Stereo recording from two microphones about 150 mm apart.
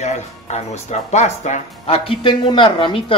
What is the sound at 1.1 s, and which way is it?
Speech, 50° left (ahead or behind).